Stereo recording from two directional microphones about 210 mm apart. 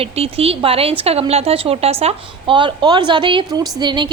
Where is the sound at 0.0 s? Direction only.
30° right (ahead or behind).